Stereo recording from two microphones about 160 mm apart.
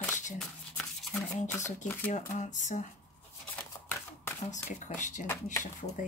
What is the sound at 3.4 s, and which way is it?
Shuffling cards, 10° left (ahead or behind).